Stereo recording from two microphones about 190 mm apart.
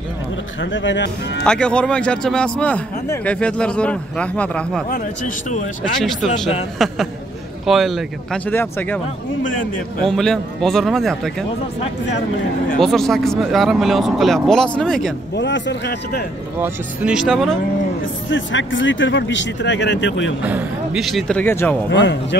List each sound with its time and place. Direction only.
0.6 s speech: 75° left (ahead or behind)
1.4 s speech: 5° left (ahead or behind)
4.8 s speech: 45° left (ahead or behind)
5.9 s speech: centre (ahead or behind)
10.0 s speech: centre (ahead or behind)
12.8 s speech: centre (ahead or behind)
15.3 s speech: 70° left (ahead or behind)
16.5 s speech: 10° right (ahead or behind)
18.0 s speech: 80° left
20.4 s speech: 5° right (ahead or behind); by 21.7 s 10° left (ahead or behind)
21.9 s speech: 70° left (ahead or behind)